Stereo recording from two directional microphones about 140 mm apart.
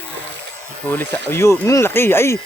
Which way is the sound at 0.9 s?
10° left (ahead or behind).